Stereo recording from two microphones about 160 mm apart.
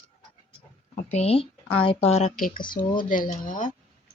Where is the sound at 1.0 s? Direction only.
40° left (ahead or behind).